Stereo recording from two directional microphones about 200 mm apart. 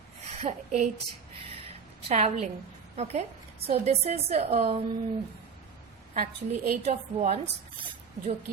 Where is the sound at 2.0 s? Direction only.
35° right (ahead or behind).